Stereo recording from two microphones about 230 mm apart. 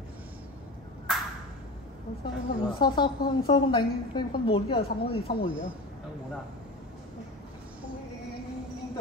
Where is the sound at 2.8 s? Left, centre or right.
Centre.